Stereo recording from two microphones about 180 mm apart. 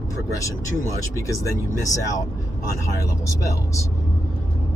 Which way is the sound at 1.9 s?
20° left (ahead or behind).